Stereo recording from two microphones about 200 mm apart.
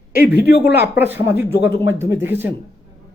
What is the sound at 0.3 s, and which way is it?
Speech, 55° left (ahead or behind).